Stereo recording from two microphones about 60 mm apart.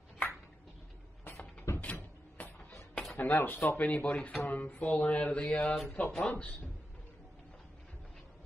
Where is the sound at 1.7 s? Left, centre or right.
Left.